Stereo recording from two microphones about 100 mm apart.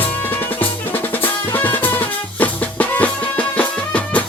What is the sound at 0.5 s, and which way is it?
Drum, 20° left (ahead or behind).